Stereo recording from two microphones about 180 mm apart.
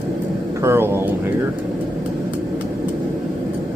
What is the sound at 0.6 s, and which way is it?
Speech, 15° right (ahead or behind).